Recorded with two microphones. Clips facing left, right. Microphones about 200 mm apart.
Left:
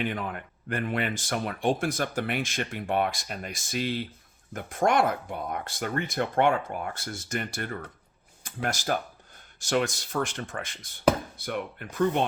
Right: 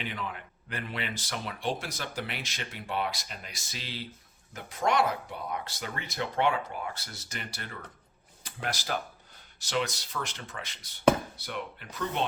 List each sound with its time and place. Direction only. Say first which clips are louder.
0.0 s speech: left 6 dB; 50° left (ahead or behind)